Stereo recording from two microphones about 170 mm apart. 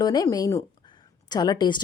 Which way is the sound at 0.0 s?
25° left (ahead or behind).